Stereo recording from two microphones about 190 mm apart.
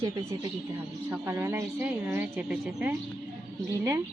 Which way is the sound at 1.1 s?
10° right (ahead or behind).